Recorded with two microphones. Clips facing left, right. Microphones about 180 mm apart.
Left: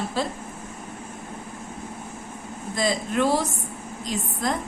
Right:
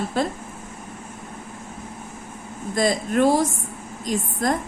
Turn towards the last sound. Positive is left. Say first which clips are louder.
# right 4 dB
turn(degrees=-50)  # may be behind; listen again after turning